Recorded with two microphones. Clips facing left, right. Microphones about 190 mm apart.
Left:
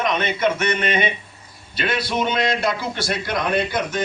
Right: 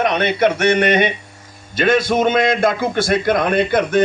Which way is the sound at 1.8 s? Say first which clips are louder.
Right 8 dB; 45° right (ahead or behind).